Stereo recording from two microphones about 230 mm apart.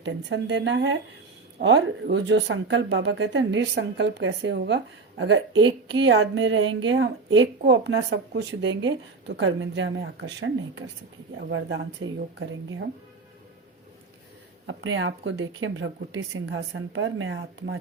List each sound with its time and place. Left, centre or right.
0.0 s speech: right
5.5 s a woman's voice: centre
6.0 s speech: right
14.7 s speech: right